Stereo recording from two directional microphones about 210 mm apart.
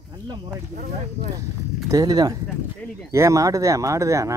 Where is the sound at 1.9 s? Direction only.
15° right (ahead or behind).